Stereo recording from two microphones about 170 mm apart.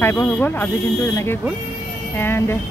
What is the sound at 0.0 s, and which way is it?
Speech, 15° left (ahead or behind).